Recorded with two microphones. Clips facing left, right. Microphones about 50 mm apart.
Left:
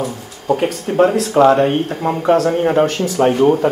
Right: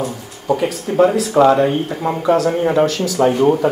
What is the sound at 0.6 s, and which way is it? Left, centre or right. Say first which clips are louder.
Speech: even; left.